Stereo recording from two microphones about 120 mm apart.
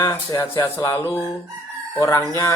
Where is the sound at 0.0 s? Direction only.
30° left (ahead or behind).